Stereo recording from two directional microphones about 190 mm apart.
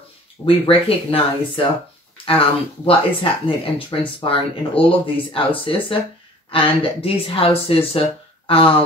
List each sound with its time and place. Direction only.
0.5 s speech: 30° left (ahead or behind)